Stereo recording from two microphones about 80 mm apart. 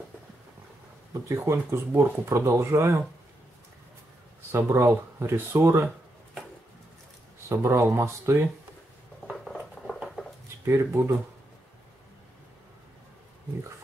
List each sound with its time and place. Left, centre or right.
1.3 s speech: right
4.5 s speech: right
7.4 s speech: right
9.3 s a sound: centre
10.6 s speech: right